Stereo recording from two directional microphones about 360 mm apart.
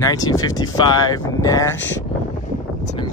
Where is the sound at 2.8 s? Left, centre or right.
Centre.